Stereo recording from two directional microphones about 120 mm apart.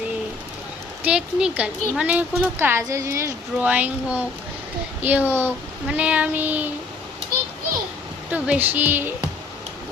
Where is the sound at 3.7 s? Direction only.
10° right (ahead or behind).